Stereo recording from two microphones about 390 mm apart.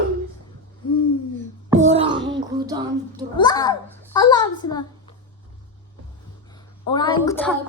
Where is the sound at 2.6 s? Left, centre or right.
Centre.